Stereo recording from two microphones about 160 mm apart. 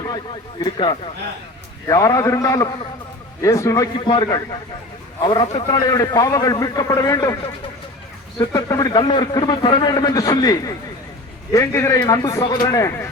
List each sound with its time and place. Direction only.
0.6 s a man's voice: 30° left (ahead or behind)
3.9 s a man's voice: 30° left (ahead or behind)
8.4 s a man's voice: 20° left (ahead or behind)